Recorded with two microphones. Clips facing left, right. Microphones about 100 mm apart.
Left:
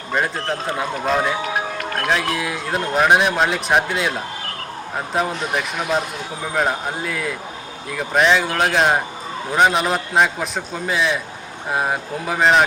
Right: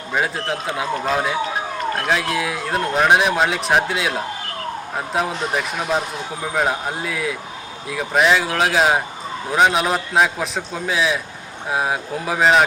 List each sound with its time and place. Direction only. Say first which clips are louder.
0.1 s speech: even; centre (ahead or behind)